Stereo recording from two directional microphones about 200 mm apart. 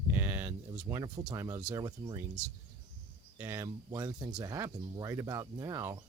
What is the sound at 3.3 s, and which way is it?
Speech, 15° right (ahead or behind).